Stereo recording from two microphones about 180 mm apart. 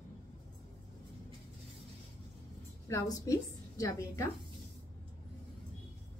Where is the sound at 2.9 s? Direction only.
20° left (ahead or behind).